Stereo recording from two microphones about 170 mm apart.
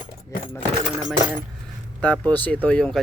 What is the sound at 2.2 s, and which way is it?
Speech, 10° left (ahead or behind).